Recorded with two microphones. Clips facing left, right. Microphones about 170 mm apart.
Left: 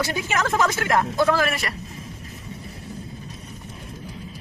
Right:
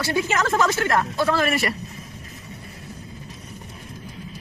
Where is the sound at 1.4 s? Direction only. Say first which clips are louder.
Right 2 dB; centre (ahead or behind).